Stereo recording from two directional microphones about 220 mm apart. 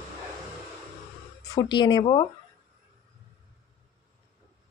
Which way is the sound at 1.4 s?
20° left (ahead or behind).